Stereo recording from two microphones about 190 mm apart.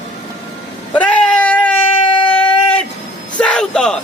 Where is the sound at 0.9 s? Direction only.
5° left (ahead or behind).